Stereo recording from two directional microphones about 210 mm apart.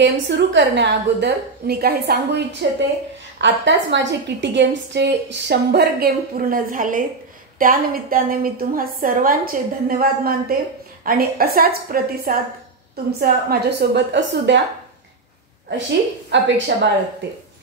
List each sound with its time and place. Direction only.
0.0 s a woman's voice: 60° right (ahead or behind)
16.3 s speech: 60° right (ahead or behind)